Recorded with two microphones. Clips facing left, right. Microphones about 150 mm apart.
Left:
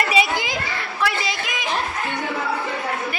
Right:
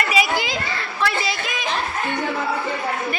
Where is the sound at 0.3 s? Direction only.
15° left (ahead or behind).